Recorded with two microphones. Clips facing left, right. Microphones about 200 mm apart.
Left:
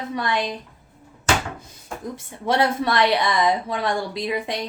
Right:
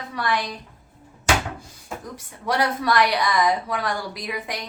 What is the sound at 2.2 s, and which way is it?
A woman's voice, 25° left (ahead or behind).